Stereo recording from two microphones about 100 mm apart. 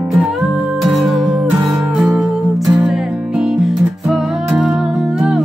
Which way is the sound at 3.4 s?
5° right (ahead or behind).